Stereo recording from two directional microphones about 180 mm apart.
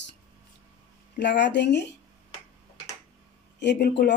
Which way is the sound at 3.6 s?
65° left (ahead or behind).